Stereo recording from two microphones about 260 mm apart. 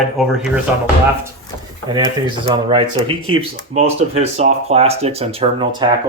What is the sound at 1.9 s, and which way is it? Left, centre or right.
Speech, centre.